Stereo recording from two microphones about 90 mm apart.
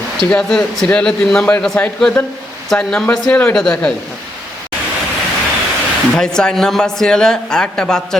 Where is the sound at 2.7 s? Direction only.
10° left (ahead or behind).